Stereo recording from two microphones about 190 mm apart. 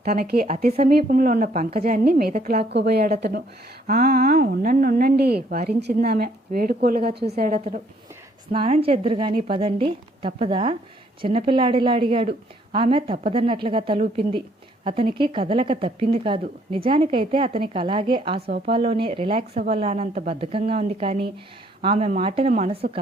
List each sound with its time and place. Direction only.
0.0 s a woman's voice: 55° right (ahead or behind)
8.5 s a woman's voice: 30° right (ahead or behind)
18.4 s speech: 55° right (ahead or behind)
18.7 s speech: 30° right (ahead or behind)